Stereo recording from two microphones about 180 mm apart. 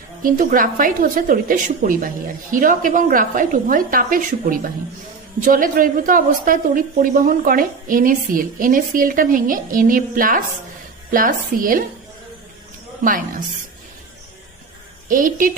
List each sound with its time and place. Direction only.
0.2 s a woman's voice: 50° right (ahead or behind)
15.0 s a woman's voice: 50° right (ahead or behind)